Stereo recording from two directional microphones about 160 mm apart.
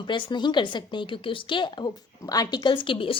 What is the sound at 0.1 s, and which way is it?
A woman's voice, 30° left (ahead or behind).